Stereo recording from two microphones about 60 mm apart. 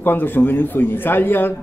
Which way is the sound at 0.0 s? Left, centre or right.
Left.